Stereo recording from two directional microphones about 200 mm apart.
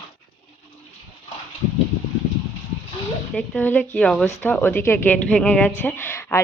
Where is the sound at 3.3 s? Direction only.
10° left (ahead or behind).